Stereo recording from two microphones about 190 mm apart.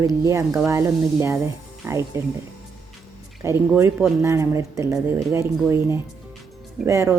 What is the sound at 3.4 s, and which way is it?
Speech, 15° right (ahead or behind).